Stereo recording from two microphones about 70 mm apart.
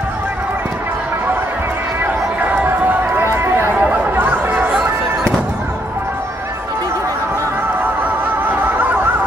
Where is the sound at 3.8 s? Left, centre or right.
Right.